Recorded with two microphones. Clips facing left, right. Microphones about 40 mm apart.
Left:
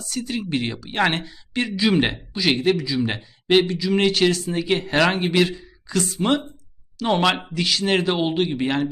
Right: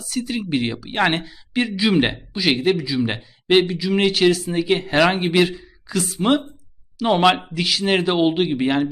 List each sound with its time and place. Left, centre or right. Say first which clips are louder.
0.0 s speech: right 2 dB; centre